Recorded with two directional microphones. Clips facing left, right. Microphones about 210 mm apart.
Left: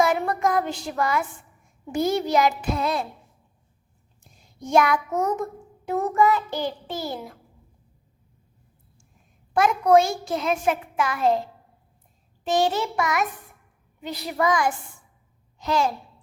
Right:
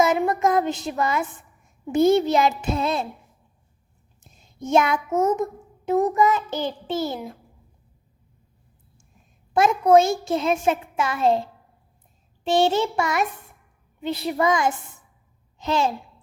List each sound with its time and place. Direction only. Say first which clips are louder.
0.2 s a child's voice: right 3 dB; 20° right (ahead or behind)
4.2 s child singing: right 4 dB; 25° right (ahead or behind)
9.5 s a child's voice: right 2 dB; 25° right (ahead or behind)
12.5 s a child's voice: right 3 dB; 25° right (ahead or behind)